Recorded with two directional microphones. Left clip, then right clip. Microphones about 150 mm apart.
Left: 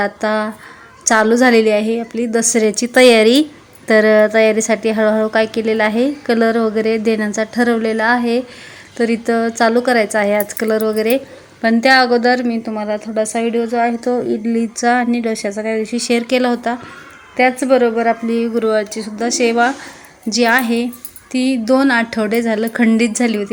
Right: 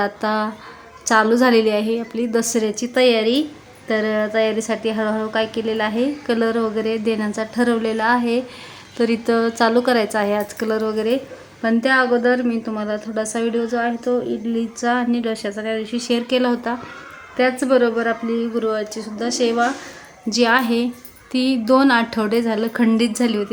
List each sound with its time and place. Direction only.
0.0 s a woman's voice: 15° left (ahead or behind)
12.1 s a woman's voice: 15° left (ahead or behind)
13.8 s speech: 35° left (ahead or behind)
14.8 s a woman's voice: 20° left (ahead or behind)